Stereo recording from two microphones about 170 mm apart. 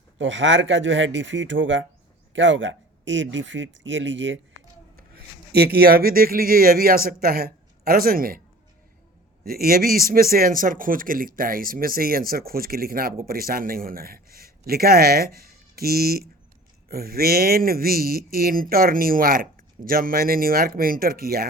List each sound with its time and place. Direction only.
0.2 s speech: 90° right
4.9 s speech: 65° right (ahead or behind)
9.4 s speech: 60° right (ahead or behind)